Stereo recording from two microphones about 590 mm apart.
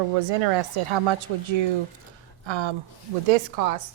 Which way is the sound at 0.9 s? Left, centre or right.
Right.